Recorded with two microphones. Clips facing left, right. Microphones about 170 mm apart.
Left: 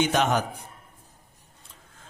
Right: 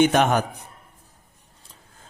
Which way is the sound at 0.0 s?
55° right (ahead or behind).